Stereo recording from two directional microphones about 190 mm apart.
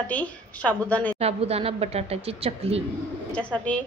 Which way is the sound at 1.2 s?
30° right (ahead or behind).